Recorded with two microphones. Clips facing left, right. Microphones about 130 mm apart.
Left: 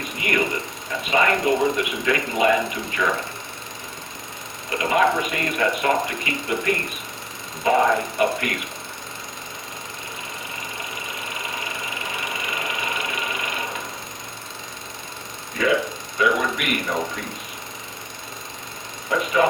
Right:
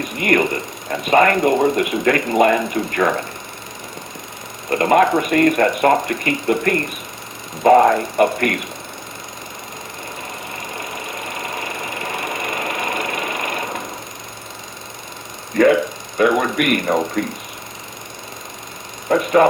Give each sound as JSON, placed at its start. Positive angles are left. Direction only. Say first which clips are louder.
{"t": 0.2, "sound": "speech", "louder": "right 6 dB", "side_deg": -50}
{"t": 4.7, "sound": "speech", "louder": "right 6 dB", "side_deg": -50}
{"t": 12.1, "sound": "sewing machine", "louder": "right 6 dB", "side_deg": -50}
{"t": 15.6, "sound": "speech", "louder": "right 8 dB", "side_deg": -50}
{"t": 19.0, "sound": "speech", "louder": "right 6 dB", "side_deg": -55}